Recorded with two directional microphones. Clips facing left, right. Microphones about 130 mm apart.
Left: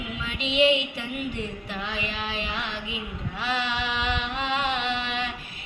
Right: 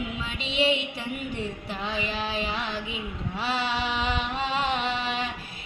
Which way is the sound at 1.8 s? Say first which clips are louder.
Right 4 dB; 35° right (ahead or behind).